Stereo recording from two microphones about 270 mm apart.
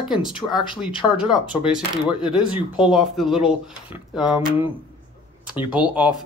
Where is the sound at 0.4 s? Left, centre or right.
Centre.